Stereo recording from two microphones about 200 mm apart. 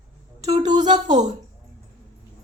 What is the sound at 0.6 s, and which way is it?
Speech, 20° right (ahead or behind).